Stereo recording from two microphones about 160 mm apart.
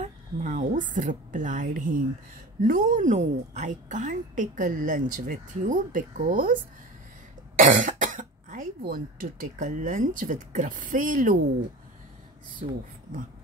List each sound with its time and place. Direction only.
0.0 s a woman's voice: 50° right (ahead or behind)
7.6 s a woman's voice: 55° right (ahead or behind)
12.6 s speech: 50° right (ahead or behind)